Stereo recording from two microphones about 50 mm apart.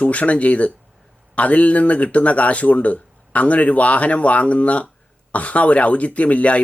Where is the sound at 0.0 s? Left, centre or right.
Left.